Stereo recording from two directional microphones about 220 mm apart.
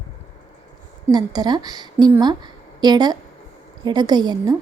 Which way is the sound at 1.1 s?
20° right (ahead or behind).